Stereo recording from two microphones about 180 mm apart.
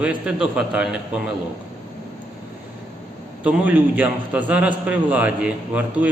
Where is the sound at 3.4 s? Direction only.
10° right (ahead or behind).